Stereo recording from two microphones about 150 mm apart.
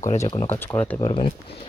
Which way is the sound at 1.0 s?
40° left (ahead or behind).